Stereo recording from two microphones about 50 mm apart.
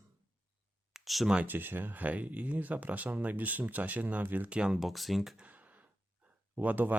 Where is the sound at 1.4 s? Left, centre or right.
Right.